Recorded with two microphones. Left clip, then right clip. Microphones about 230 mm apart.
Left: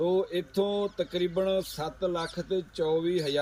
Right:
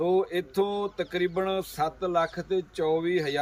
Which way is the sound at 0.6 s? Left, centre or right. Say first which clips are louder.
Even; centre.